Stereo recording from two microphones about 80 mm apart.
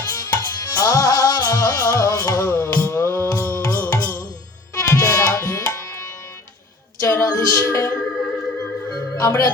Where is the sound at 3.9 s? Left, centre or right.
Left.